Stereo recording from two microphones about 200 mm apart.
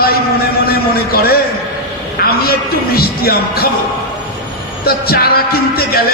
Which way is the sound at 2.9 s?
50° left (ahead or behind).